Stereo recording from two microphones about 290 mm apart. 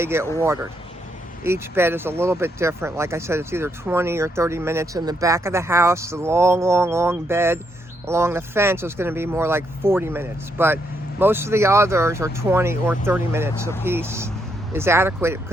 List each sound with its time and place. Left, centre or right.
0.0 s speech: centre